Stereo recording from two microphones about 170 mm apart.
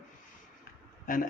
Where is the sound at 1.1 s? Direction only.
55° left (ahead or behind).